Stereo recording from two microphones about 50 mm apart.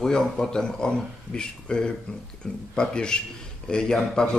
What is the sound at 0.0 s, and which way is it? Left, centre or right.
A man's voice, centre.